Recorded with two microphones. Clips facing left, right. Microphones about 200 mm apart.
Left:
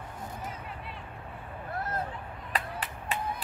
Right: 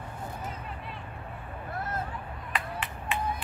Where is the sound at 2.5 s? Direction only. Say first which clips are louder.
Even; 35° left (ahead or behind).